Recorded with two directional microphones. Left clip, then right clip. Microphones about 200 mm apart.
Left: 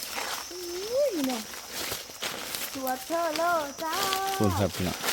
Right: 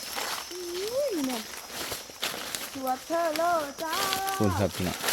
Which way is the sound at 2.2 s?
10° right (ahead or behind).